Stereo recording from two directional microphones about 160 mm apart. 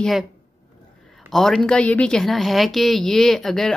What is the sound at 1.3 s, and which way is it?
A woman's voice, centre (ahead or behind).